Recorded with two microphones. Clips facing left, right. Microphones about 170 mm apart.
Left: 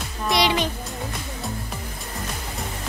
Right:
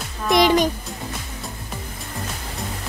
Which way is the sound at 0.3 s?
45° right (ahead or behind).